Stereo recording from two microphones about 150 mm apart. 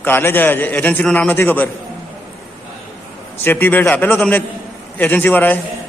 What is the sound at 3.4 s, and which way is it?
A man's voice, 15° left (ahead or behind).